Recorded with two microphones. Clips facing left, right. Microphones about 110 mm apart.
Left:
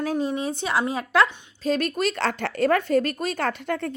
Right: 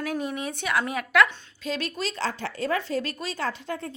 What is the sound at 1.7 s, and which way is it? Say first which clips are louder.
Speech: left 7 dB; 50° left (ahead or behind).